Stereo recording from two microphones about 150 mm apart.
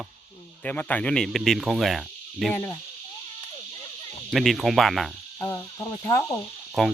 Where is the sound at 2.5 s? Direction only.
10° left (ahead or behind).